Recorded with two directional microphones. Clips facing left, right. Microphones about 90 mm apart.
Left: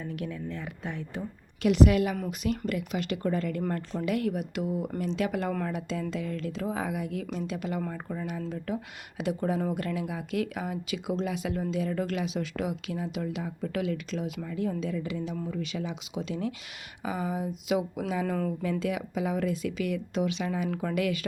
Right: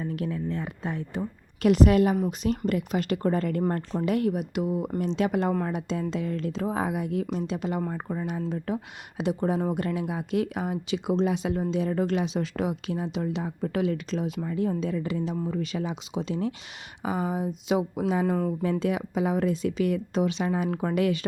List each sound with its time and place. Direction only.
0.0 s a woman's voice: 35° right (ahead or behind)